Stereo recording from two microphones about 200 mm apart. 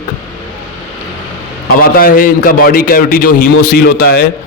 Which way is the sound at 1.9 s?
45° left (ahead or behind).